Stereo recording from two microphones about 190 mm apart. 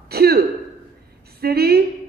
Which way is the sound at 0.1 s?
55° right (ahead or behind).